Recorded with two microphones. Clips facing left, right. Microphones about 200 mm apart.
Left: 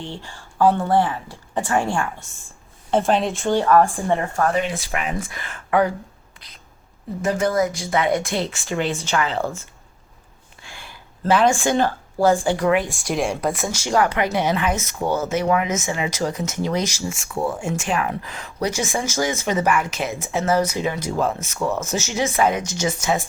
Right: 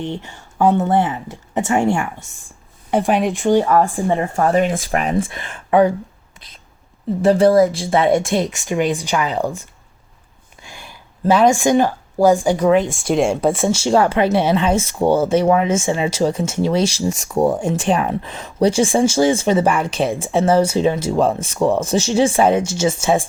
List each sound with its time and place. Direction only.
0.0 s speech: 20° right (ahead or behind)
4.4 s speech: 45° right (ahead or behind); by 5.9 s 20° right (ahead or behind)
7.2 s speech: 35° right (ahead or behind); by 9.5 s 15° right (ahead or behind)
10.6 s a sound: 20° right (ahead or behind)
13.1 s speech: 25° right (ahead or behind)